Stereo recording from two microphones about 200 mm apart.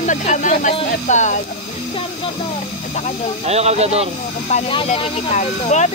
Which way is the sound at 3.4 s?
30° right (ahead or behind).